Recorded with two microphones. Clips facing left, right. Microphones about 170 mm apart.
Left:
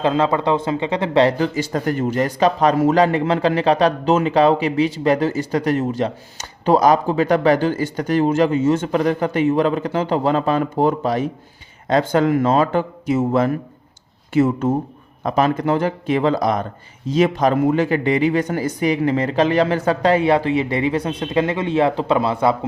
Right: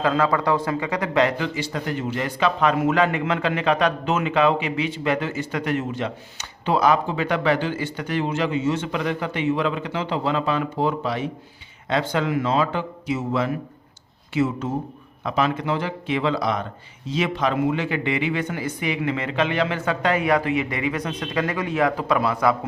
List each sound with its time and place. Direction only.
0.0 s speech: 25° left (ahead or behind)